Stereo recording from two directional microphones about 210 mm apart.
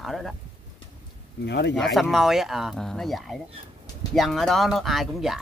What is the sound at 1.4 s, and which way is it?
Speech, 55° left (ahead or behind).